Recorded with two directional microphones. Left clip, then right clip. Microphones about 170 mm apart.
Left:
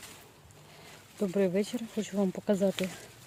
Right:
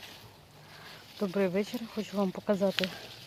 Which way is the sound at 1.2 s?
25° left (ahead or behind).